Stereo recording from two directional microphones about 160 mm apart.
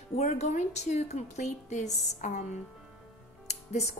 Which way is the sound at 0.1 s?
45° left (ahead or behind).